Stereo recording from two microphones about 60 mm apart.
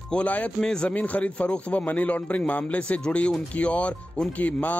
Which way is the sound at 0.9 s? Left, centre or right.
Left.